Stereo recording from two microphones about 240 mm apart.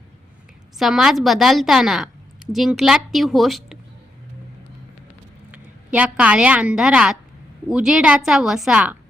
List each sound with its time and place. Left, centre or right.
0.8 s a woman's voice: centre
5.5 s a woman's voice: centre